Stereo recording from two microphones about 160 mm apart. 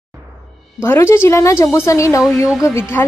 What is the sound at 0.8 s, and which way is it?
A woman's voice, 15° left (ahead or behind).